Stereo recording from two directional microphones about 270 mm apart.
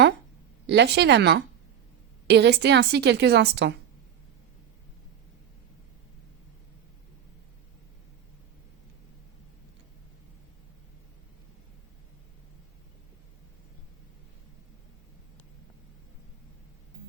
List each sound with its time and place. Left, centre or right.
0.7 s a woman's voice: right